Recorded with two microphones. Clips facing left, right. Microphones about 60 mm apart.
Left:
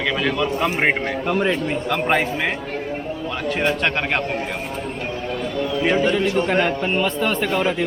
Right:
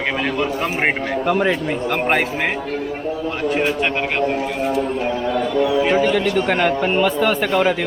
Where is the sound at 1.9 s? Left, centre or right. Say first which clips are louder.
Right 1 dB; right.